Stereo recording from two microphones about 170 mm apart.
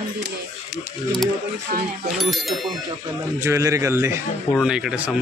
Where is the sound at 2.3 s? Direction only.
Centre (ahead or behind).